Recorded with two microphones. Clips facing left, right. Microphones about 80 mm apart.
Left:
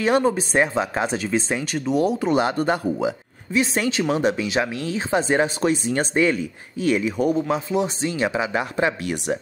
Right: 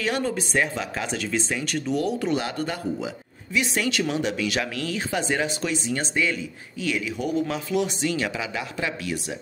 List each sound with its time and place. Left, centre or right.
0.4 s speech: left
7.4 s speech: left